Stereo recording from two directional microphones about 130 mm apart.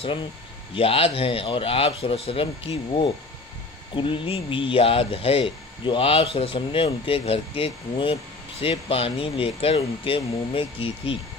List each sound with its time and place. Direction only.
0.7 s speech: 45° left (ahead or behind)